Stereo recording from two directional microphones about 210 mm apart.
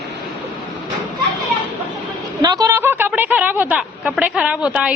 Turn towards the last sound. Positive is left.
turn(degrees=-5)  # may be behind; listen again after turning